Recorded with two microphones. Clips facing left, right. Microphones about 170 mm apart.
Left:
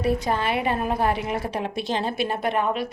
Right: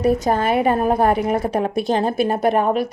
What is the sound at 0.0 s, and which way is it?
A woman's voice, 45° right (ahead or behind).